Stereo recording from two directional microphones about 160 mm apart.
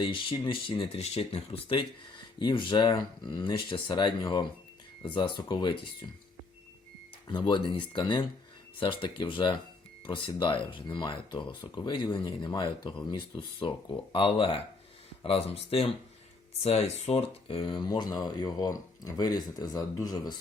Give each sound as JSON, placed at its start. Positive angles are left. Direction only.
{"t": 0.0, "sound": "speech", "side_deg": 30}
{"t": 7.3, "sound": "speech", "side_deg": 30}